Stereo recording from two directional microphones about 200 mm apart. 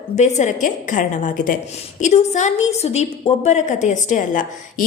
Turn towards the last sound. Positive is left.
turn(degrees=35)  # may be behind; listen again after turning